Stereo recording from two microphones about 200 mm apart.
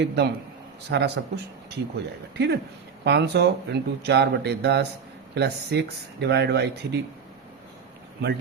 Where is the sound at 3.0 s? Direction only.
55° right (ahead or behind).